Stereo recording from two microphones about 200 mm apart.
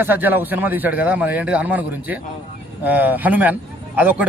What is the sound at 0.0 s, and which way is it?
Speech, 10° right (ahead or behind).